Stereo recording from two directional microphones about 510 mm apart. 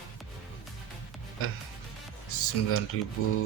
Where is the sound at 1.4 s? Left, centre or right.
Left.